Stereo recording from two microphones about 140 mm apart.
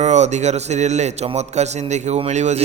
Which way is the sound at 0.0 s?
55° right (ahead or behind).